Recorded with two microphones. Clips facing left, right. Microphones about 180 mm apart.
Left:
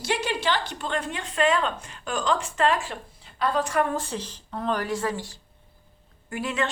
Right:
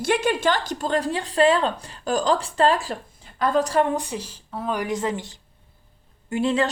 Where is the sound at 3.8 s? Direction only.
15° right (ahead or behind).